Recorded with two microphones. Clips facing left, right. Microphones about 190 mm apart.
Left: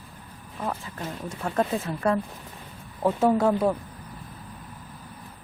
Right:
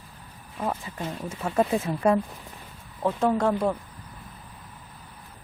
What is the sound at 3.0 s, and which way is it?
Speech, 10° left (ahead or behind).